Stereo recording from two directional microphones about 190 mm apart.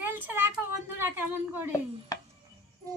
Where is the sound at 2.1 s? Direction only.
20° left (ahead or behind).